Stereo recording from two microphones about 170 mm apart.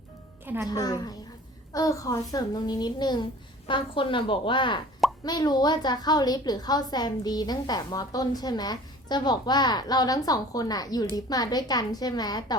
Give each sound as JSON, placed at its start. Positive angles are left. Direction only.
{"t": 0.4, "sound": "speech", "side_deg": -10}
{"t": 0.7, "sound": "a woman's voice", "side_deg": 25}